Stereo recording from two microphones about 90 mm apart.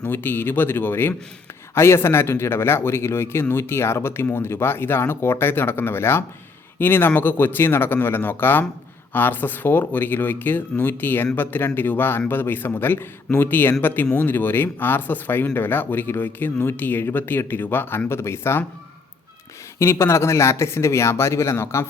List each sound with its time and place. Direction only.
0.0 s speech: 25° left (ahead or behind)
19.8 s speech: 30° left (ahead or behind)